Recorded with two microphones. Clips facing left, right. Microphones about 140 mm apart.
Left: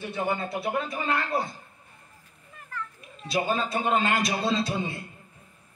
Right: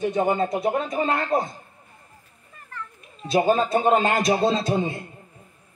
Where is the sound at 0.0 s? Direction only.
40° right (ahead or behind).